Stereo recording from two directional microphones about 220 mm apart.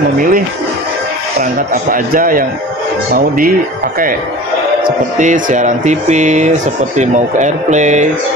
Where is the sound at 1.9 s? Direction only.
40° right (ahead or behind).